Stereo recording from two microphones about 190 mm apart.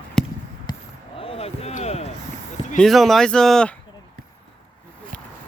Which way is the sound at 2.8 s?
Centre (ahead or behind).